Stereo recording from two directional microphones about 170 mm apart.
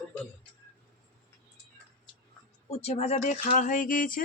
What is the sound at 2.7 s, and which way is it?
Speech, 40° left (ahead or behind).